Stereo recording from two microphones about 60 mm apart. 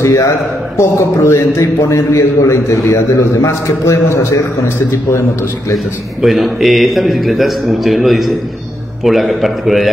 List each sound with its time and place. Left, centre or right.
0.0 s a man's voice: left
0.7 s a man's voice: left
6.2 s a man's voice: centre